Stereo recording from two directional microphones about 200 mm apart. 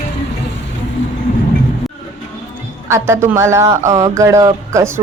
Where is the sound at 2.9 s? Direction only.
15° right (ahead or behind).